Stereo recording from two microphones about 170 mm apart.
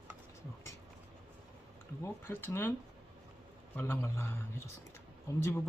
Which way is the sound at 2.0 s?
15° left (ahead or behind).